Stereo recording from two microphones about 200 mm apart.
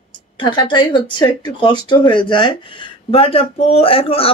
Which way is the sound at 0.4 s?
25° left (ahead or behind).